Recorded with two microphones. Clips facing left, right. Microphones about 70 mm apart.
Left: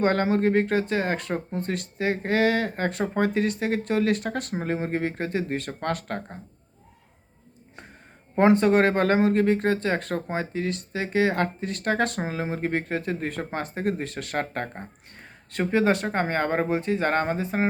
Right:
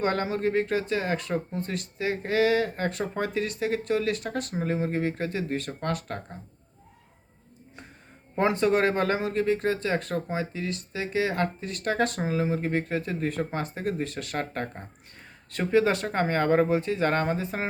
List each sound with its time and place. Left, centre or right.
0.0 s speech: left
8.4 s speech: left